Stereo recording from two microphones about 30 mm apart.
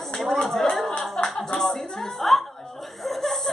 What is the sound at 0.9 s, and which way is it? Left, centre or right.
Clapping, centre.